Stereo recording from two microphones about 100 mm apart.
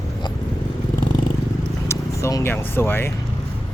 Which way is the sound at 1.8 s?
35° left (ahead or behind).